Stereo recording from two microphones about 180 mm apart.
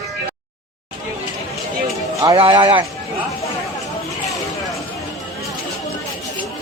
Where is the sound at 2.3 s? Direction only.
30° right (ahead or behind).